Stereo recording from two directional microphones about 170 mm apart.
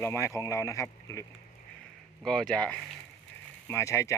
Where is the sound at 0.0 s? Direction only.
15° left (ahead or behind).